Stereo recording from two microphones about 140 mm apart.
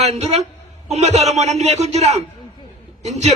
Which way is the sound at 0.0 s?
50° right (ahead or behind).